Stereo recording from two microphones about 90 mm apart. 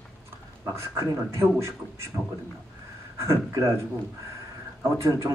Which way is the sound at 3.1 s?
35° right (ahead or behind).